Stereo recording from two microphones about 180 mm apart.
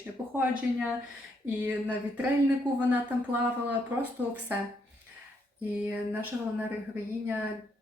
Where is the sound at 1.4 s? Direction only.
10° right (ahead or behind).